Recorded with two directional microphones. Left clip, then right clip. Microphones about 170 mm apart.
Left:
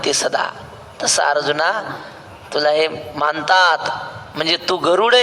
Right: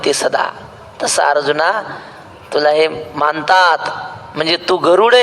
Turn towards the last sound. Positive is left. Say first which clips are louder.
# right 4 dB
turn(degrees=-40)  # may be behind; listen again after turning